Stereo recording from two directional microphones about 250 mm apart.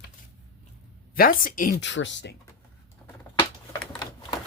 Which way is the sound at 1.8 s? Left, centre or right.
Left.